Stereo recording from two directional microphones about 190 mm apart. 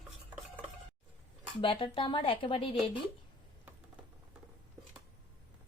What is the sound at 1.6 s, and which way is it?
Speech, 25° left (ahead or behind).